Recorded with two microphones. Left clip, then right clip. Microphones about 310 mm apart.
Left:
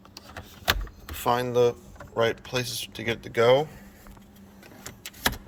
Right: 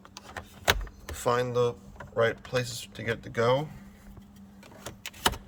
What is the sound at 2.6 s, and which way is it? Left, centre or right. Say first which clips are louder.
Speech: left 3 dB; right.